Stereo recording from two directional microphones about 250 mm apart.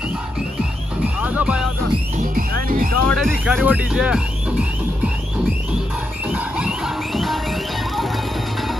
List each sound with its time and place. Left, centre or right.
1.2 s music: centre
2.3 s music: right
3.1 s speech: centre
6.2 s music: centre